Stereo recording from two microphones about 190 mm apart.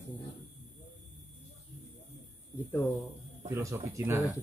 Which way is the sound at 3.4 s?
15° right (ahead or behind).